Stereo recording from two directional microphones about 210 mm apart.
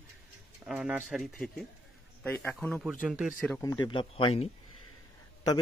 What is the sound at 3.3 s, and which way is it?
Speech, 5° left (ahead or behind).